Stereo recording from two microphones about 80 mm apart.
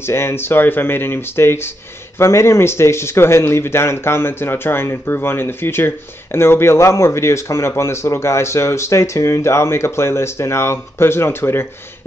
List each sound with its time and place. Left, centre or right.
0.0 s speech: left